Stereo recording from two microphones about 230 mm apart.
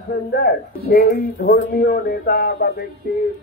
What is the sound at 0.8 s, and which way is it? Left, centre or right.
Speech, left.